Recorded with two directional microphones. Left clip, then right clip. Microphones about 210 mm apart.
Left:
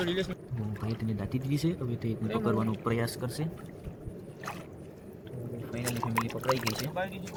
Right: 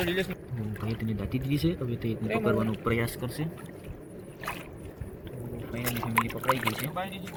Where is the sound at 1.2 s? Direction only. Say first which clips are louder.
Right 3 dB; centre (ahead or behind).